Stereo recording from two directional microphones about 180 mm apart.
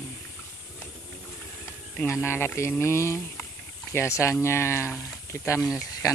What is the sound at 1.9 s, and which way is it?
Speech, 15° left (ahead or behind).